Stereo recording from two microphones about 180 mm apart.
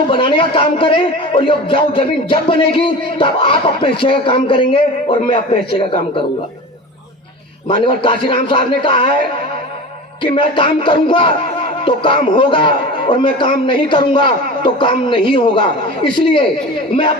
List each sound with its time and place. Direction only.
0.1 s a man's voice: 30° left (ahead or behind)
7.7 s a man's voice: 30° left (ahead or behind)
10.2 s a man's voice: 25° left (ahead or behind)